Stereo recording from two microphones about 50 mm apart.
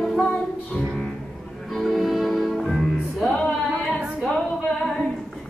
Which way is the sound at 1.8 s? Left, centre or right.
Centre.